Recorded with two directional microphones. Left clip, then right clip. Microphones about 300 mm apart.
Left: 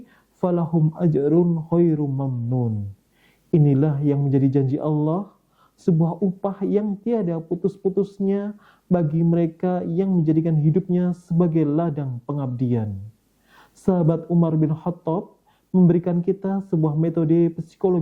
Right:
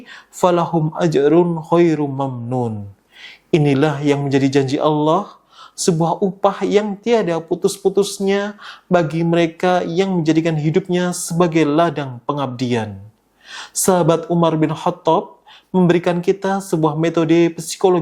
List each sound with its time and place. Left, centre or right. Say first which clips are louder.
0.1 s speech: right 9 dB; centre
0.7 s speech: right 5 dB; right
0.9 s speech: right 7 dB; centre
2.3 s speech: right 6 dB; right
3.2 s speech: right 5 dB; centre
6.0 s speech: right 7 dB; right
6.4 s speech: right 9 dB; centre